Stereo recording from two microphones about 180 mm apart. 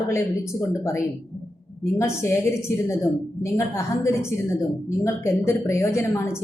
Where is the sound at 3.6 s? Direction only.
15° left (ahead or behind).